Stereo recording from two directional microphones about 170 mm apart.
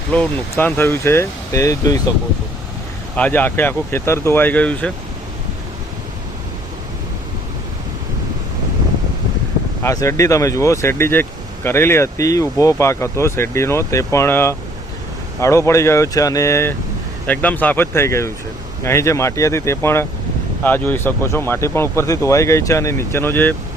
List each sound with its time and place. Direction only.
0.1 s speech: 10° left (ahead or behind)
3.2 s speech: 10° left (ahead or behind)
9.8 s speech: 20° left (ahead or behind)